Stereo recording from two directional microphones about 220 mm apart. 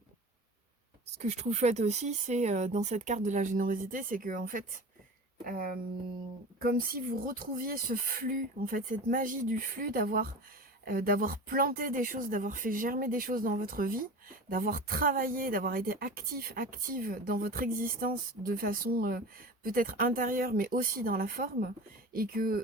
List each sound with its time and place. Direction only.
1.2 s speech: 30° right (ahead or behind)
6.6 s speech: 40° right (ahead or behind)